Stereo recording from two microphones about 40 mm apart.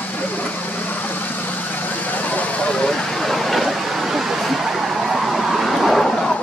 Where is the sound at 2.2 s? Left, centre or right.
Left.